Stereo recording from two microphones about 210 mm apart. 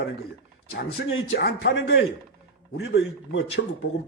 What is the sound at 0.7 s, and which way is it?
Speech, 70° left (ahead or behind).